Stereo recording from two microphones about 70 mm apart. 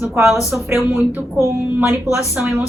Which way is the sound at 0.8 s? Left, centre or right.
Centre.